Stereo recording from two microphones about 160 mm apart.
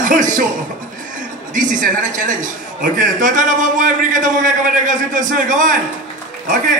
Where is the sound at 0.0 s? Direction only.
55° right (ahead or behind).